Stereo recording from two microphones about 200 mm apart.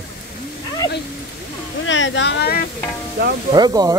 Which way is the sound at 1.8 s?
70° left (ahead or behind).